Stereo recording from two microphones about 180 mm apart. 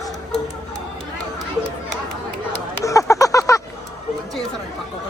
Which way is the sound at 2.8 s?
15° left (ahead or behind).